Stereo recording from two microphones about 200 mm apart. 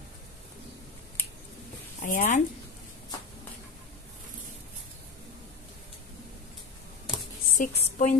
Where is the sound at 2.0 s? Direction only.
40° left (ahead or behind).